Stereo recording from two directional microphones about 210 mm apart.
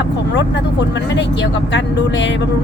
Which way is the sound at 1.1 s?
60° left (ahead or behind).